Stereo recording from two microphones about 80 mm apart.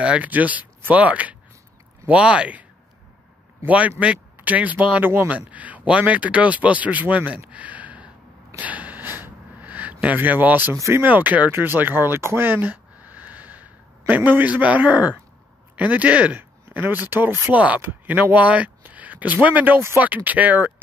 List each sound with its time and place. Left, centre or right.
0.0 s speech: centre
3.6 s speech: centre
8.5 s a sound: centre
10.7 s speech: right
11.1 s speech: right